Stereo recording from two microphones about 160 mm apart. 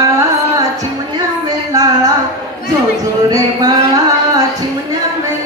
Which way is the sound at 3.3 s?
25° right (ahead or behind).